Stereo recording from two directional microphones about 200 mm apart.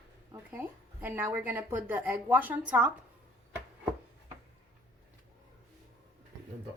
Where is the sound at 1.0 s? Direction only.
10° right (ahead or behind).